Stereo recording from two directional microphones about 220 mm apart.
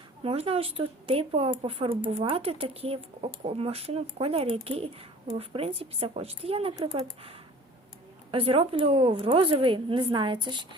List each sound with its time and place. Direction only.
0.2 s speech: 25° right (ahead or behind)